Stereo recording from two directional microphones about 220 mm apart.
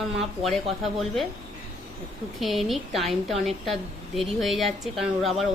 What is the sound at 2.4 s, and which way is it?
A woman's voice, centre (ahead or behind).